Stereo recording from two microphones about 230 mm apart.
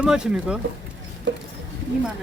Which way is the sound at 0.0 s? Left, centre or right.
Centre.